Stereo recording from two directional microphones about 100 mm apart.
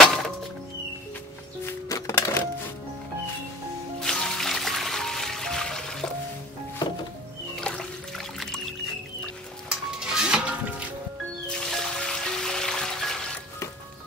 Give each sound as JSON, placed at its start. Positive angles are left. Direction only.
{"t": 1.9, "sound": "music", "side_deg": 35}
{"t": 4.0, "sound": "music", "side_deg": 5}
{"t": 7.6, "sound": "music", "side_deg": 5}
{"t": 9.7, "sound": "music", "side_deg": -5}
{"t": 11.4, "sound": "music", "side_deg": 5}